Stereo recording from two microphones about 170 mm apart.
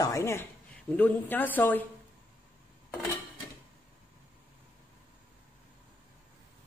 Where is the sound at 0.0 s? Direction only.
15° left (ahead or behind).